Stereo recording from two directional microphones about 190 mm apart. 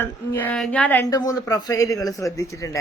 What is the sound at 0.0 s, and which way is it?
A woman's voice, 10° left (ahead or behind).